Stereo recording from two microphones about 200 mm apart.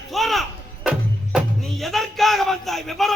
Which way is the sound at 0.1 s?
Centre (ahead or behind).